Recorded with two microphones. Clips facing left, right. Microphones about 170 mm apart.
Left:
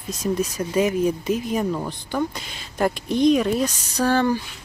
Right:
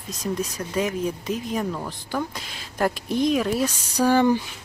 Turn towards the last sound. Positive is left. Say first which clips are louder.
# right 1 dB
turn(degrees=-15)  # may be behind; listen again after turning